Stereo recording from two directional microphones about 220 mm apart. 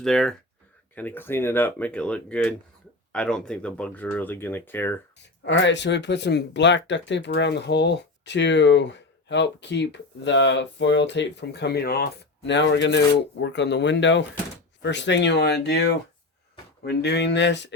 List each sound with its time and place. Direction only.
0.0 s speech: centre (ahead or behind)
5.5 s speech: 55° left (ahead or behind)
16.8 s speech: 50° left (ahead or behind)